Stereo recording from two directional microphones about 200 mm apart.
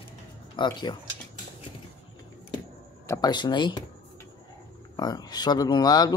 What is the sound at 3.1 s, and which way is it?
Speech, 20° left (ahead or behind).